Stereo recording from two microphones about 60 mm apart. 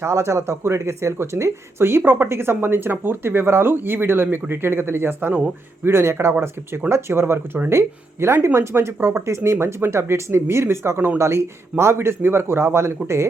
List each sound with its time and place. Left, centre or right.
0.0 s speech: right